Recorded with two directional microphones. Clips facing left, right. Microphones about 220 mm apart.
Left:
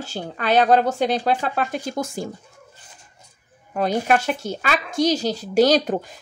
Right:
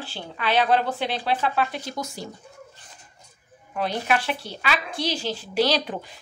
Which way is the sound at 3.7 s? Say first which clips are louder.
Left 5 dB; 45° left (ahead or behind).